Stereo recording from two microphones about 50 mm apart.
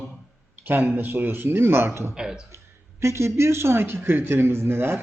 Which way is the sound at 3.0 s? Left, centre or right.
Right.